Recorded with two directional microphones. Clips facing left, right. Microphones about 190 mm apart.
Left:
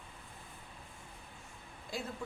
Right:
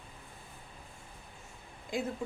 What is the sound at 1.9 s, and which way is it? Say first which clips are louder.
Speech: right 6 dB; 20° right (ahead or behind).